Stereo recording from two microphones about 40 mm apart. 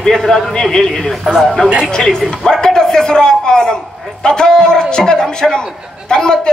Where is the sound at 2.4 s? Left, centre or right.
Centre.